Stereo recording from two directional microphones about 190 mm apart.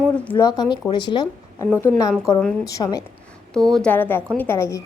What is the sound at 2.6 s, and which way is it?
Speech, 15° left (ahead or behind).